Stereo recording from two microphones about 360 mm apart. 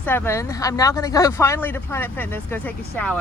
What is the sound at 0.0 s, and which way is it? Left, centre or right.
Speech, centre.